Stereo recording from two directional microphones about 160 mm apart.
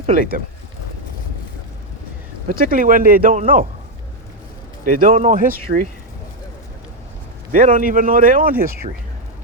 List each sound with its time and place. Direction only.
0.1 s speech: 60° right (ahead or behind)
2.5 s speech: 60° right (ahead or behind)
4.9 s speech: 55° right (ahead or behind)
7.5 s speech: 55° right (ahead or behind)